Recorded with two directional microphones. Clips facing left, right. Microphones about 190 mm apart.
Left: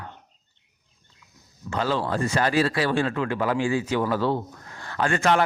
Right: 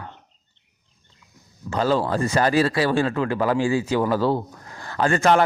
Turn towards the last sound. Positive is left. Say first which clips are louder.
# right 3 dB
turn(degrees=-45)  # may be behind; listen again after turning